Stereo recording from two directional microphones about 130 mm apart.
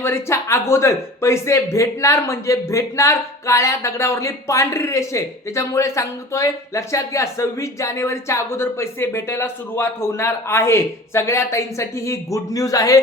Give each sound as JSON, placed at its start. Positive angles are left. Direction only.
{"t": 0.0, "sound": "speech", "side_deg": 20}